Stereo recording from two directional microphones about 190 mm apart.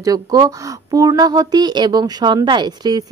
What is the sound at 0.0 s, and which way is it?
Speech, 20° right (ahead or behind).